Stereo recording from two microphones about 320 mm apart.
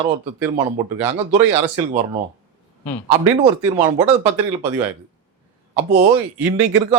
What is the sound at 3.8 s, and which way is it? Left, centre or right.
Speech, centre.